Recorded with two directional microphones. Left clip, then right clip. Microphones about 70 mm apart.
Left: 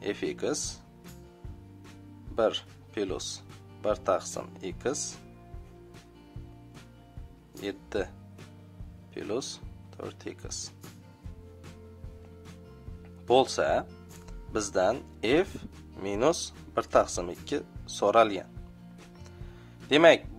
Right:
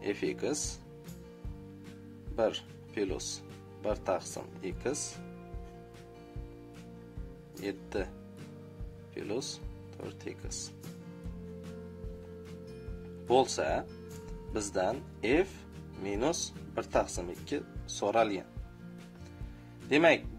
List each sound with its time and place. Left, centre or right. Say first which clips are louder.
0.0 s speech: left 2 dB; left
2.3 s speech: left 4 dB; left
7.6 s speech: left 3 dB; left
9.1 s speech: left 3 dB; left
13.3 s speech: left 4 dB; left
14.5 s speech: left 5 dB; left
14.8 s speech: left 6 dB; left
19.9 s speech: left 6 dB; left